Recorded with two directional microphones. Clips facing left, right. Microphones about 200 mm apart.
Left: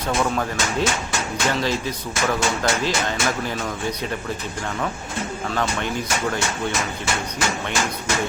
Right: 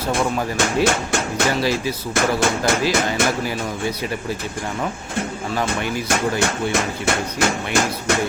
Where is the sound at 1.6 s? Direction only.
10° right (ahead or behind).